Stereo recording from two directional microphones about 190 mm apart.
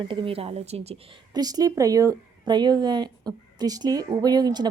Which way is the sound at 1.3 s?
20° right (ahead or behind).